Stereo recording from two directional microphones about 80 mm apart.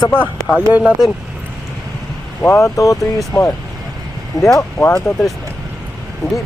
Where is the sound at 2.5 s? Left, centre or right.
Left.